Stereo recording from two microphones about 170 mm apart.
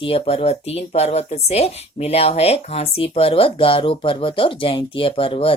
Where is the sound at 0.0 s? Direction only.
35° left (ahead or behind).